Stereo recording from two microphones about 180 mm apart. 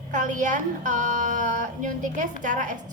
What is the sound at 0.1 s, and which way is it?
A woman's voice, 45° right (ahead or behind).